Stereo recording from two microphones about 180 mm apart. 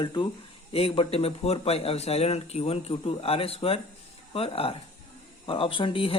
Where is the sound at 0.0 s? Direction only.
25° left (ahead or behind).